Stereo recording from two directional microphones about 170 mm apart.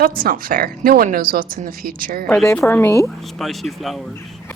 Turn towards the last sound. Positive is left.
turn(degrees=0)  # may be behind; listen again after turning